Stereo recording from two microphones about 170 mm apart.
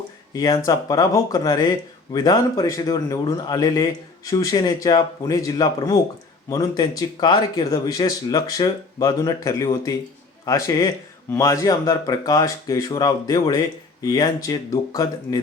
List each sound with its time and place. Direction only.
0.3 s a man's voice: 20° left (ahead or behind)